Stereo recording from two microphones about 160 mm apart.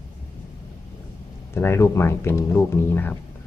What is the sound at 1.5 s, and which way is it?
Speech, 15° left (ahead or behind).